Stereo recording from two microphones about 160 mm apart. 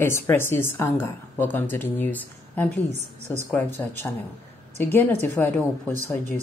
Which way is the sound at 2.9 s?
45° right (ahead or behind).